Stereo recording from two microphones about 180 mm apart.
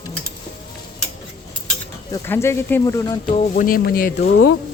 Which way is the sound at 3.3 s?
45° left (ahead or behind).